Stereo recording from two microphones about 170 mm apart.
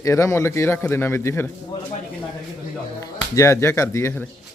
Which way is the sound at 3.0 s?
15° left (ahead or behind).